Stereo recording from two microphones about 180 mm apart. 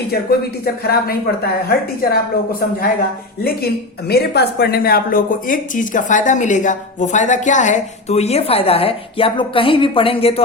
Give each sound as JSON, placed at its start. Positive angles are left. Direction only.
{"t": 0.6, "sound": "a woman's voice", "side_deg": 60}
{"t": 4.1, "sound": "speech", "side_deg": 65}